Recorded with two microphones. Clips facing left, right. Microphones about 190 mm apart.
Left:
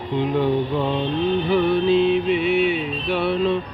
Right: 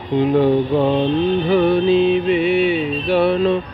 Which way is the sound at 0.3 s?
45° right (ahead or behind).